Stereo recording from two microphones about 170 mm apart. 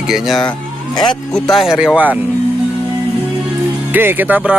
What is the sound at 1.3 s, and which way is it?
Speech, centre (ahead or behind).